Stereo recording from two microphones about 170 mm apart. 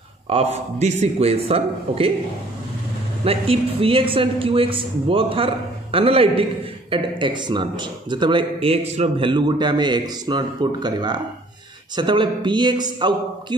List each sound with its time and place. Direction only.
0.3 s a man's voice: 40° right (ahead or behind)
3.3 s a man's voice: 35° right (ahead or behind)